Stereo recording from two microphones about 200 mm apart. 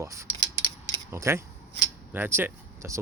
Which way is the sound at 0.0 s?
15° right (ahead or behind).